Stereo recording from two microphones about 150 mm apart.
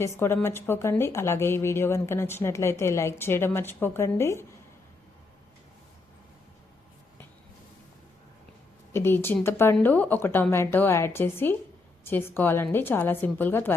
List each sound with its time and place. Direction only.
0.0 s speech: 15° left (ahead or behind)
8.9 s speech: 15° left (ahead or behind)